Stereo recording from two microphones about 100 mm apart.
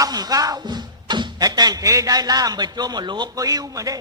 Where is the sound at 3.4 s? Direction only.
35° right (ahead or behind).